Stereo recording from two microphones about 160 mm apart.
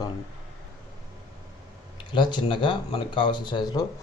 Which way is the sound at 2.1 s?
30° left (ahead or behind).